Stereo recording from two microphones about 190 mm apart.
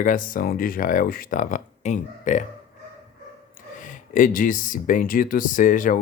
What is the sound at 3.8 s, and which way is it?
Speech, 45° left (ahead or behind).